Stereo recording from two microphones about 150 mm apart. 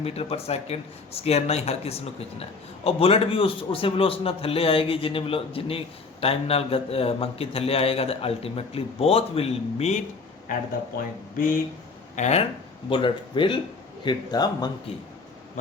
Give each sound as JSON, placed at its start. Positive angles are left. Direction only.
{"t": 0.0, "sound": "speech", "side_deg": 40}
{"t": 12.1, "sound": "speech", "side_deg": 50}
{"t": 12.9, "sound": "speech", "side_deg": 35}